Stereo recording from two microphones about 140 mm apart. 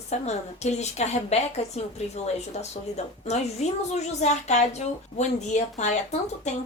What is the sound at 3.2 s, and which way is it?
A woman's voice, 50° left (ahead or behind).